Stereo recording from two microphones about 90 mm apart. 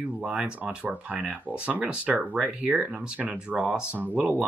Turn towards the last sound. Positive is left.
turn(degrees=-15)  # may be behind; listen again after turning